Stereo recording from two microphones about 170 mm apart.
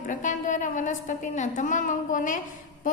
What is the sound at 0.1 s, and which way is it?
A woman's voice, 50° left (ahead or behind).